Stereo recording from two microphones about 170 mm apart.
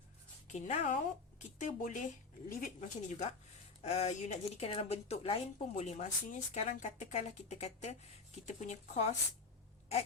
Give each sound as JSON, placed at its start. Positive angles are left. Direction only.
{"t": 0.4, "sound": "a woman's voice", "side_deg": 40}